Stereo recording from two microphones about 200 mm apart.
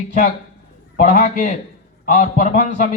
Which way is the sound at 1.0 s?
35° left (ahead or behind).